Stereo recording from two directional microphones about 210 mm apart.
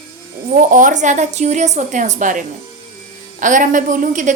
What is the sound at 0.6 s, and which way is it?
A woman's voice, 40° right (ahead or behind).